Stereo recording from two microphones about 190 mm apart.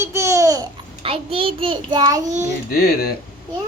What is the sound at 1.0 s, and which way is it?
Child singing, 30° right (ahead or behind).